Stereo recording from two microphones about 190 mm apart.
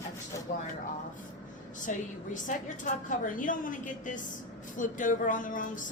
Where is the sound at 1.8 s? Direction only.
40° left (ahead or behind).